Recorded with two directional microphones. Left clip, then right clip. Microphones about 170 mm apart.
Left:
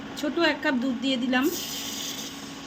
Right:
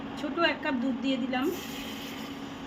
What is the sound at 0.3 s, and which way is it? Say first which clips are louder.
A woman's voice: left 3 dB; 55° left (ahead or behind).